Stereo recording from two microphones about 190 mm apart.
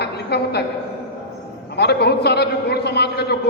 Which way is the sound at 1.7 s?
60° left (ahead or behind).